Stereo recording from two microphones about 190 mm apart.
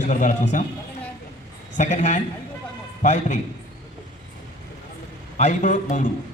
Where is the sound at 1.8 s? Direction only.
40° left (ahead or behind).